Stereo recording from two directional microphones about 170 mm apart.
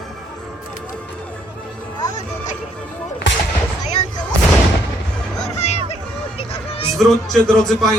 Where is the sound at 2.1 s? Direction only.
45° left (ahead or behind).